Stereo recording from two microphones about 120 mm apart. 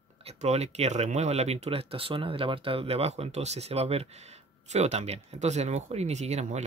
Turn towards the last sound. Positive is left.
turn(degrees=-70)  # may be behind; listen again after turning